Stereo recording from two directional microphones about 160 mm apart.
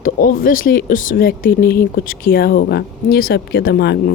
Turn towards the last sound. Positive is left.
turn(degrees=80)